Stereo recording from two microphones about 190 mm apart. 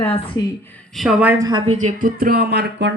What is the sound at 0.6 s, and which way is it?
Speech, 10° left (ahead or behind).